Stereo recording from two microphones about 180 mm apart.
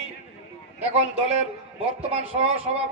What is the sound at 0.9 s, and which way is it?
A man's voice, 35° right (ahead or behind).